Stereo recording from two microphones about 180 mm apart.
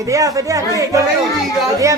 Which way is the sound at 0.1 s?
20° right (ahead or behind).